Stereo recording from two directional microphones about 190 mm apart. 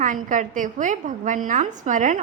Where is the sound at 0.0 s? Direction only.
45° right (ahead or behind).